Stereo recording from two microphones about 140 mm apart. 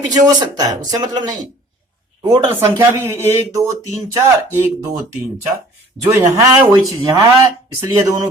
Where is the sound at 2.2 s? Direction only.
35° right (ahead or behind).